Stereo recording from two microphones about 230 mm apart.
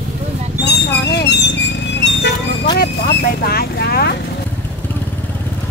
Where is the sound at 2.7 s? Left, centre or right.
Left.